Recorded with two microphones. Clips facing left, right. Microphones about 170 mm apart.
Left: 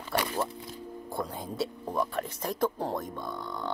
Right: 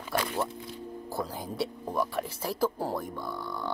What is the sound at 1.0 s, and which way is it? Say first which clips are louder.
Speech: even; centre (ahead or behind).